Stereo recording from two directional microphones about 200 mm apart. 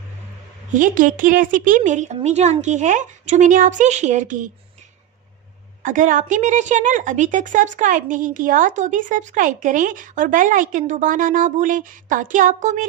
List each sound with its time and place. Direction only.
0.7 s a woman's voice: 40° right (ahead or behind)
5.8 s a woman's voice: 40° right (ahead or behind)